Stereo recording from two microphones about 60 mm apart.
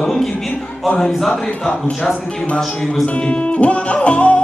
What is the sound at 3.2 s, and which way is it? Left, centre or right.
Music, left.